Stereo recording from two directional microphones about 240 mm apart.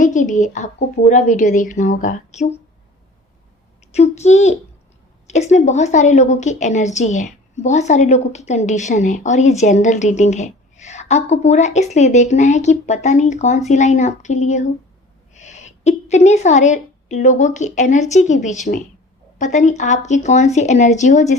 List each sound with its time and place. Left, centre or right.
0.0 s a woman's voice: left
3.9 s a woman's voice: left